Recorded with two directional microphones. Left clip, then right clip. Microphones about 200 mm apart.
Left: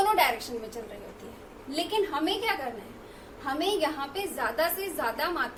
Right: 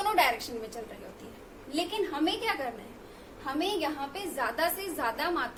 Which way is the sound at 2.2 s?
20° right (ahead or behind).